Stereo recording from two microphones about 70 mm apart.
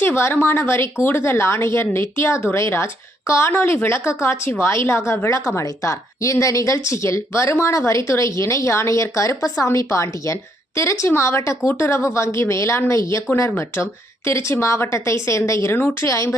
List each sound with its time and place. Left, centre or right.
0.0 s speech: left
3.5 s speech: left